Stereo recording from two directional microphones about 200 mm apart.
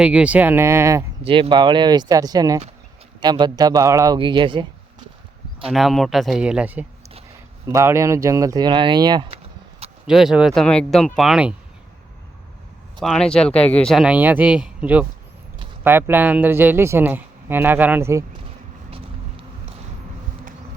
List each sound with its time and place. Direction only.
0.0 s speech: 5° right (ahead or behind)
1.2 s a man's voice: 25° right (ahead or behind)
5.7 s speech: centre (ahead or behind); by 9.4 s 25° right (ahead or behind)
10.1 s speech: centre (ahead or behind)
13.0 s speech: centre (ahead or behind); by 18.3 s 15° right (ahead or behind)
18.9 s vehicle: 25° right (ahead or behind)